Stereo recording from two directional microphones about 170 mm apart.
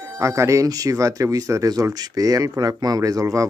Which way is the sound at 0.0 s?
20° right (ahead or behind).